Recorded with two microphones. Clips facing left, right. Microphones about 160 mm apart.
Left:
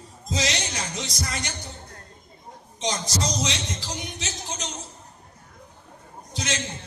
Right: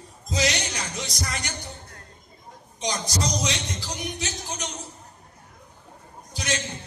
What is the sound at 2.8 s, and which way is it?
A man's voice, 25° left (ahead or behind).